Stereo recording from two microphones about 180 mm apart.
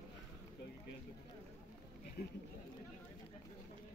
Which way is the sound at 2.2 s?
65° left (ahead or behind).